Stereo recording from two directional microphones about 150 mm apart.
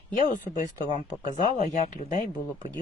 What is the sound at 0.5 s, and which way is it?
Speech, 60° left (ahead or behind).